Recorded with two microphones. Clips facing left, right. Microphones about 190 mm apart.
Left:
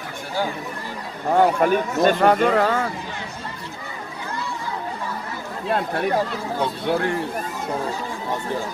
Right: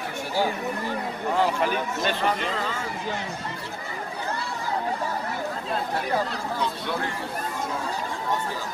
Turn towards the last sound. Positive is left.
turn(degrees=55)  # may be behind; listen again after turning